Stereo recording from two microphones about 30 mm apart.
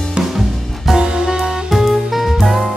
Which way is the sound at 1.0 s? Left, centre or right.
Right.